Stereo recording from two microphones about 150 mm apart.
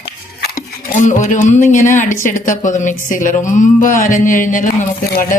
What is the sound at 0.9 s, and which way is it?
A woman's voice, 55° left (ahead or behind).